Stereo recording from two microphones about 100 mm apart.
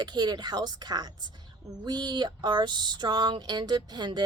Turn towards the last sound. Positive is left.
turn(degrees=-45)  # may be behind; listen again after turning